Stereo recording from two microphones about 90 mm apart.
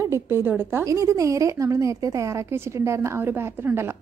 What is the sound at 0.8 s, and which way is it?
A woman's voice, 35° right (ahead or behind).